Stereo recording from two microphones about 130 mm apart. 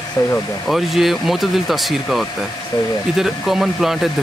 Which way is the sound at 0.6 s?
Centre (ahead or behind).